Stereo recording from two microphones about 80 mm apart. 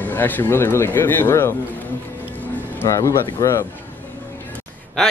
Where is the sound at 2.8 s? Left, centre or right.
Left.